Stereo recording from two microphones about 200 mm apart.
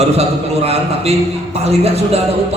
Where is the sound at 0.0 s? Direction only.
30° right (ahead or behind).